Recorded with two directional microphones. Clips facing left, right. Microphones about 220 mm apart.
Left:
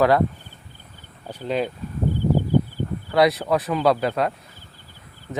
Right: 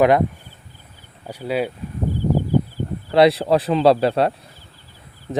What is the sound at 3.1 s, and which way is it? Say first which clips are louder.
Speech: right 4 dB; 30° right (ahead or behind).